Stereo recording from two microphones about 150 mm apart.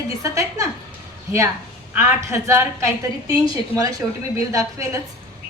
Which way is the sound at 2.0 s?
20° right (ahead or behind).